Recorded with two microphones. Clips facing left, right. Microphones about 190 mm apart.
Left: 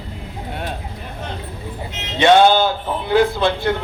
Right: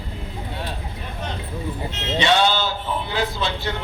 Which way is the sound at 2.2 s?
50° left (ahead or behind).